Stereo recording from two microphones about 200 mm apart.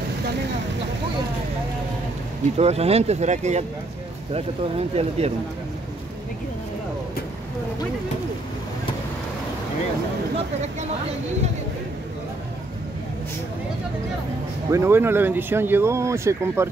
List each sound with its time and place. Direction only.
2.5 s speech: 30° right (ahead or behind)
14.7 s speech: 15° right (ahead or behind)